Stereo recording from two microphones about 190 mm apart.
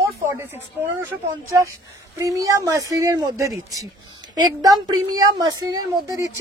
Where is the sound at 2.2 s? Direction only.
15° right (ahead or behind).